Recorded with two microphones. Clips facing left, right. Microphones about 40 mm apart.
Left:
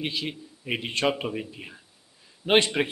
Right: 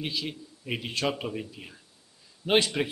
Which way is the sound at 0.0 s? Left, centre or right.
Left.